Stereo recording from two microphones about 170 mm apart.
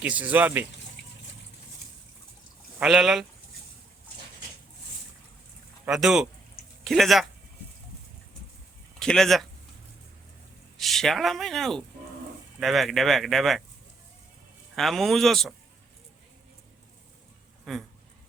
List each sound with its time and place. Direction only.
0.0 s speech: 10° right (ahead or behind)
1.0 s vehicle: 90° left
2.7 s speech: 5° right (ahead or behind)
5.8 s speech: 5° right (ahead or behind)
9.0 s speech: 5° left (ahead or behind)
10.8 s speech: centre (ahead or behind)
14.8 s speech: centre (ahead or behind)
17.7 s speech: centre (ahead or behind)